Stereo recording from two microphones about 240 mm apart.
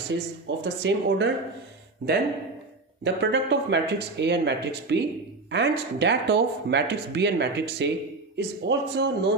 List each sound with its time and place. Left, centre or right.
0.1 s speech: right
3.0 s speech: right